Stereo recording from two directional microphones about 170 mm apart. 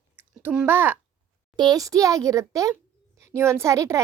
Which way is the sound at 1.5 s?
25° right (ahead or behind).